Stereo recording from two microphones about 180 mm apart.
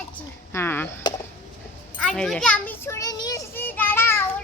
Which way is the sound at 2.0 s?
5° left (ahead or behind).